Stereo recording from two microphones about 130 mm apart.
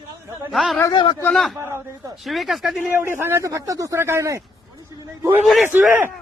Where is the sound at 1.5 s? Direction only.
20° right (ahead or behind).